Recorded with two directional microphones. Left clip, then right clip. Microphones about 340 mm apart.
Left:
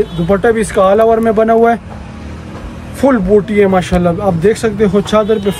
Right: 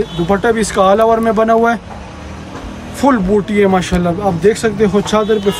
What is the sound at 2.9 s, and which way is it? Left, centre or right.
A man's voice, centre.